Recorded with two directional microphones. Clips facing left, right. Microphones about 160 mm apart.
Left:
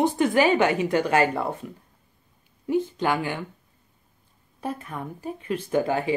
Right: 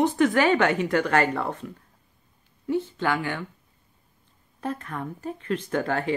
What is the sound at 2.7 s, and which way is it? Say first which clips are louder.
Speech: left 2 dB; 15° left (ahead or behind).